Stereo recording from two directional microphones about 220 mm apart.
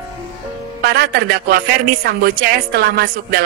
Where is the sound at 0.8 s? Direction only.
45° right (ahead or behind).